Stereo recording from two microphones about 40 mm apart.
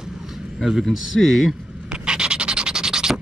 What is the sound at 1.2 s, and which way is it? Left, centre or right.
Speech, centre.